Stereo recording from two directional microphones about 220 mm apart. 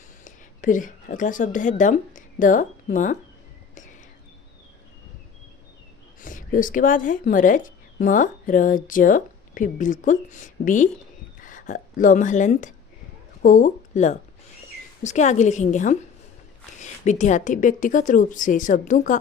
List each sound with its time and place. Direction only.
0.3 s speech: 35° left (ahead or behind)
6.2 s a woman's voice: 35° left (ahead or behind)